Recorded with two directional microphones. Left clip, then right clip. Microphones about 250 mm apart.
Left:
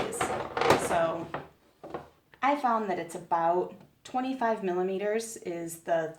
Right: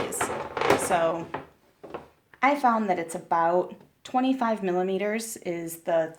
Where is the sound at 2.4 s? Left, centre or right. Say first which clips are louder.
Right 4 dB; right.